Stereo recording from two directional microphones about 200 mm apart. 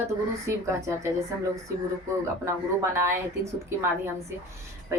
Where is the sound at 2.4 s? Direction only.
15° right (ahead or behind).